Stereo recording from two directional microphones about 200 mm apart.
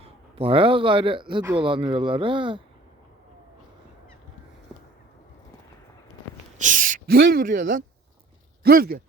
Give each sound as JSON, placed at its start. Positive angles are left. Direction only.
{"t": 0.0, "sound": "a man's voice", "side_deg": -25}
{"t": 6.6, "sound": "speech", "side_deg": -40}